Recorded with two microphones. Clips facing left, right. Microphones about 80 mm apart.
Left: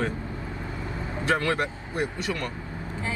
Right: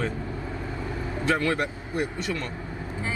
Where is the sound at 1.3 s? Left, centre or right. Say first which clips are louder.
Even; left.